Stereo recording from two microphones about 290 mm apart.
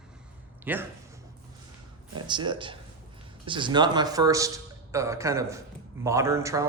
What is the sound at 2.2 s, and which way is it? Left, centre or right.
Speech, centre.